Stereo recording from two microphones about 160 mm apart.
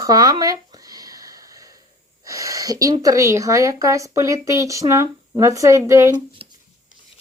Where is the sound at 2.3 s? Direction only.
20° right (ahead or behind).